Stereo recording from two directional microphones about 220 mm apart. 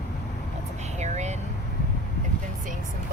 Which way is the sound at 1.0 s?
30° right (ahead or behind).